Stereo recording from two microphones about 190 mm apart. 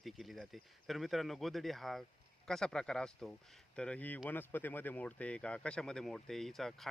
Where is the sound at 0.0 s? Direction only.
Centre (ahead or behind).